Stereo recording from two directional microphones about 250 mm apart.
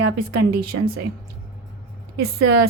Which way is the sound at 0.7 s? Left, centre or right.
Right.